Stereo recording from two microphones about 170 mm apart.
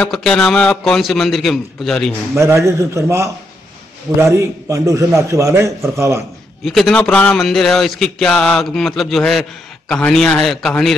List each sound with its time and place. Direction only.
0.0 s a man's voice: 5° left (ahead or behind)
2.3 s a man's voice: 15° right (ahead or behind)
6.6 s a man's voice: centre (ahead or behind)